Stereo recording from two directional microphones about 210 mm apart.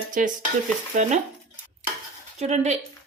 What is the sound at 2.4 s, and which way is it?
Speech, 30° right (ahead or behind).